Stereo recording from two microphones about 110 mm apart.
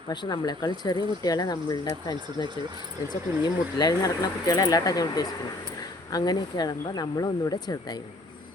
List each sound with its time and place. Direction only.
0.1 s speech: 40° left (ahead or behind)
3.3 s speech: 25° right (ahead or behind)
3.8 s speech: 35° left (ahead or behind)